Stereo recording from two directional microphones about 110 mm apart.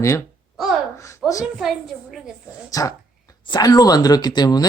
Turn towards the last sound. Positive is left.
turn(degrees=35)  # may be behind; listen again after turning